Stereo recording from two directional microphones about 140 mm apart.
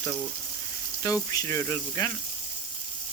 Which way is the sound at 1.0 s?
20° left (ahead or behind).